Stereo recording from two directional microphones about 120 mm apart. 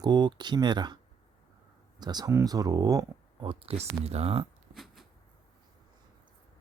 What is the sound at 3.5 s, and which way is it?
Speech, 50° right (ahead or behind).